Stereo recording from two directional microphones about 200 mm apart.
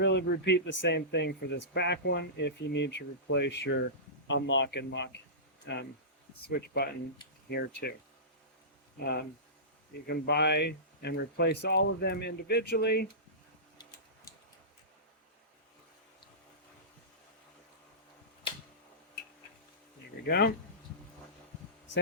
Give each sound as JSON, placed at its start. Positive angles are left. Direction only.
{"t": 0.0, "sound": "speech", "side_deg": 60}
{"t": 6.4, "sound": "speech", "side_deg": 50}
{"t": 9.0, "sound": "speech", "side_deg": 55}
{"t": 13.7, "sound": "tick-tock", "side_deg": 20}
{"t": 20.2, "sound": "speech", "side_deg": 55}